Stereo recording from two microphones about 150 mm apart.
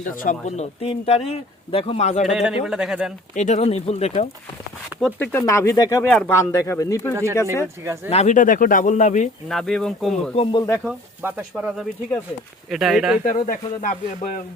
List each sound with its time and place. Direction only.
0.0 s speech: 60° left (ahead or behind)
2.2 s speech: 5° right (ahead or behind)
3.3 s speech: 50° left (ahead or behind)
4.9 s speech: centre (ahead or behind)
5.3 s speech: 20° left (ahead or behind)
8.1 s speech: 50° left (ahead or behind)
9.5 s speech: centre (ahead or behind)
10.3 s speech: 40° left (ahead or behind)
11.2 s speech: 15° right (ahead or behind)
13.3 s speech: 60° left (ahead or behind)